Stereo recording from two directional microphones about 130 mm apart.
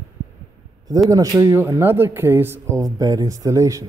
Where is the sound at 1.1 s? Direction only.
25° right (ahead or behind).